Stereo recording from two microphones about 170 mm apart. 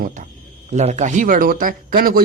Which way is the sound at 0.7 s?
45° right (ahead or behind).